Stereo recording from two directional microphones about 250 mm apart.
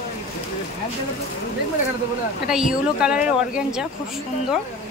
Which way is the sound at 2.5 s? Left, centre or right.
Centre.